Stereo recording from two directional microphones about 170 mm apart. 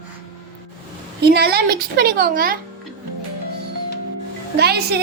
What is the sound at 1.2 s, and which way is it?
Music, 70° right (ahead or behind).